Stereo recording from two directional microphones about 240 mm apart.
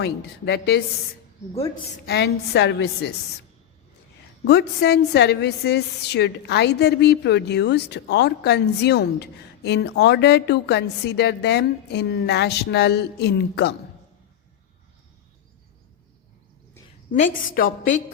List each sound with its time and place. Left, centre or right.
0.0 s a woman's voice: left
4.4 s a woman's voice: left
17.2 s a woman's voice: left